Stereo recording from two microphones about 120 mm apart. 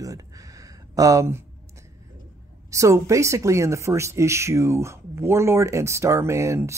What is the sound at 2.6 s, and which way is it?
Speech, 25° right (ahead or behind).